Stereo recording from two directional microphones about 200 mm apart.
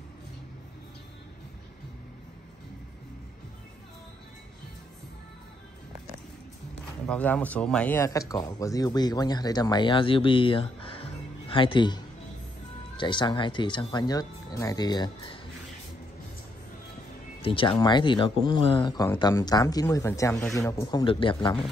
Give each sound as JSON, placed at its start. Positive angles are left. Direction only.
{"t": 7.1, "sound": "speech", "side_deg": 5}
{"t": 17.4, "sound": "speech", "side_deg": 25}